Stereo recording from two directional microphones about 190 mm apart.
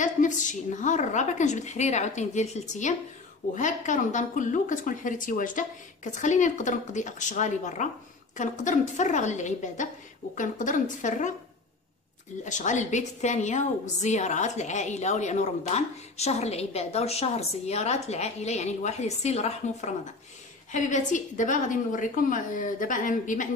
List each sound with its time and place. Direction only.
0.0 s a woman's voice: 40° left (ahead or behind)
12.4 s a woman's voice: 40° left (ahead or behind)